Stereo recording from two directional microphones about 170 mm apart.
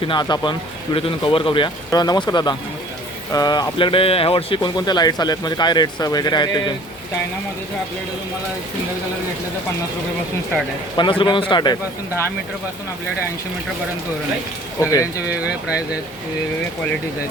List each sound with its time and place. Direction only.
0.0 s speech: 25° left (ahead or behind)
10.9 s speech: 30° left (ahead or behind)
14.8 s speech: 20° left (ahead or behind)